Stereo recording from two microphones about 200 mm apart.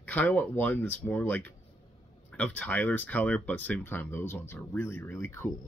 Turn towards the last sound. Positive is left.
turn(degrees=10)  # may be behind; listen again after turning